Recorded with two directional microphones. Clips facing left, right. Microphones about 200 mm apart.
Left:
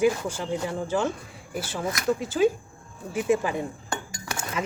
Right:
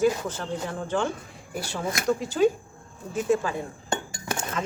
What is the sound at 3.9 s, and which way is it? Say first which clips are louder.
Cutlery: right 3 dB; 25° right (ahead or behind).